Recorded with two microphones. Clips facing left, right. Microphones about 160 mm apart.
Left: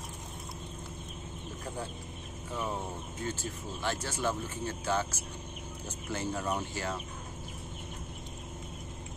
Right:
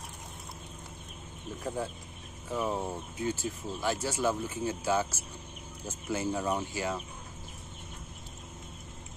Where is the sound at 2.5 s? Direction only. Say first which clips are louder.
Right 4 dB; 10° right (ahead or behind).